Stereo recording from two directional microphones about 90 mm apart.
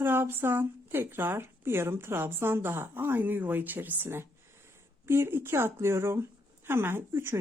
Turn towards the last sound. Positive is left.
turn(degrees=-25)  # may be behind; listen again after turning